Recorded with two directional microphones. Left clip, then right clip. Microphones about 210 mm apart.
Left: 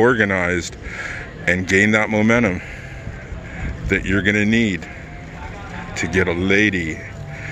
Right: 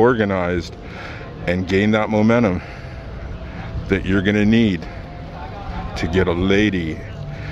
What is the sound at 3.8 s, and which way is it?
Speech, 10° right (ahead or behind).